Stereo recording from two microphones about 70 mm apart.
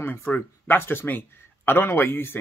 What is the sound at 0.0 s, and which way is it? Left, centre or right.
Speech, left.